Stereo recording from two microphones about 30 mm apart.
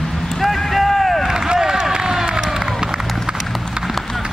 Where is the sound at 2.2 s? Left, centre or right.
Centre.